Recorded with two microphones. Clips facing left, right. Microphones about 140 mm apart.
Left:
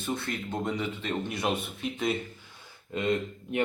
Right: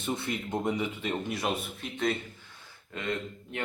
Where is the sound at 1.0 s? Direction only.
Centre (ahead or behind).